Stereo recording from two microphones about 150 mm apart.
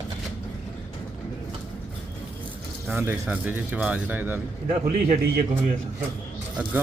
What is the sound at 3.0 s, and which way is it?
Speech, 10° right (ahead or behind).